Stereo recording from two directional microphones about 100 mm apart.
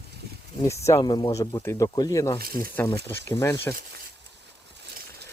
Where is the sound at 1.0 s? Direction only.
45° left (ahead or behind).